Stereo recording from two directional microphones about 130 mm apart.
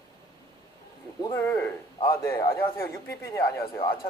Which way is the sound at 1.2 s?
20° left (ahead or behind).